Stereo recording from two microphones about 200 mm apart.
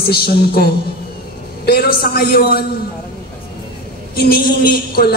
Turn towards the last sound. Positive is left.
turn(degrees=50)  # may be behind; listen again after turning